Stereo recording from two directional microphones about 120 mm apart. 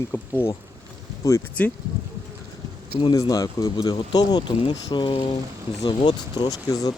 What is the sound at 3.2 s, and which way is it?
Speech, 30° left (ahead or behind).